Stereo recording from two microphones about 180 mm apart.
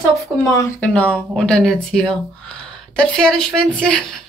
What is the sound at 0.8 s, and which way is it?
Speech, 5° left (ahead or behind).